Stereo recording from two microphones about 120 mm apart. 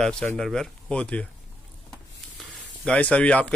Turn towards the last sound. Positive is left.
turn(degrees=10)  # may be behind; listen again after turning